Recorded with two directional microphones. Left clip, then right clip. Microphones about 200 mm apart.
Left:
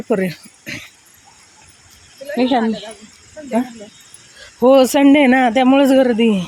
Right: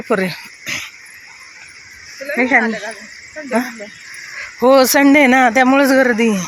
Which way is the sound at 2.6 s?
30° right (ahead or behind).